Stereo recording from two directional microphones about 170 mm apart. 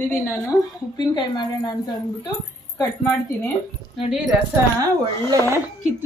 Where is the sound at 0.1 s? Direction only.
15° left (ahead or behind).